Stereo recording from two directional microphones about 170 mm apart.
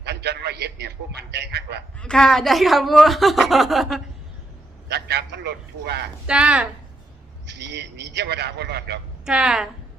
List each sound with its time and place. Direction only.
0.0 s a man's voice: 75° right (ahead or behind)
2.0 s a woman's voice: 5° left (ahead or behind)
4.9 s a man's voice: 70° right (ahead or behind)
6.2 s speech: 5° right (ahead or behind)
7.4 s a man's voice: 90° right
9.2 s a woman's voice: 5° right (ahead or behind)